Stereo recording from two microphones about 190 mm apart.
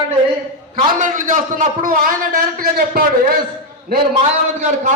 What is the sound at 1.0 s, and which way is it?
A man's voice, 45° right (ahead or behind).